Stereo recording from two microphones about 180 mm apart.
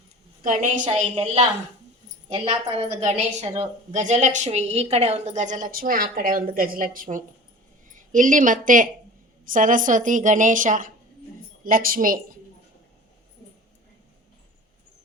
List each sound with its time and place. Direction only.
0.4 s a woman's voice: 45° right (ahead or behind)
2.3 s a woman's voice: 35° right (ahead or behind); by 12.2 s 50° right (ahead or behind)